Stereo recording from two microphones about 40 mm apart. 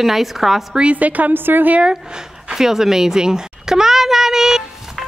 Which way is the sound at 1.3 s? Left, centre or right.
Right.